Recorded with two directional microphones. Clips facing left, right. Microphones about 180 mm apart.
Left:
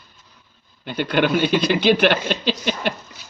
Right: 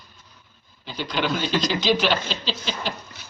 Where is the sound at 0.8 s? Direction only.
60° left (ahead or behind).